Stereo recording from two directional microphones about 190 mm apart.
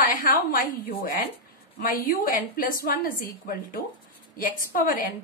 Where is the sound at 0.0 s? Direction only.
50° left (ahead or behind).